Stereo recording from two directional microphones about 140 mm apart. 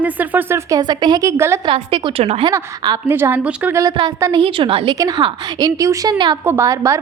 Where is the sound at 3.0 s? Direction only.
15° right (ahead or behind).